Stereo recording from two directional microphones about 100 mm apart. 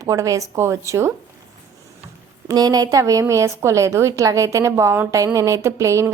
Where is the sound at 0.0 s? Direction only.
35° right (ahead or behind).